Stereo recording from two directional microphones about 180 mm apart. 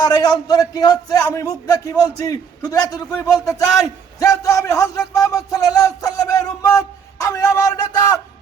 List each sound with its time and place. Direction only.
0.0 s a man's voice: 20° left (ahead or behind)